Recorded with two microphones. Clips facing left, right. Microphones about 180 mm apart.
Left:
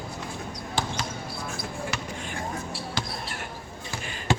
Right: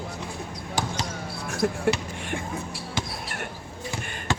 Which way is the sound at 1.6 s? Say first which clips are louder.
Right 12 dB; 65° right (ahead or behind).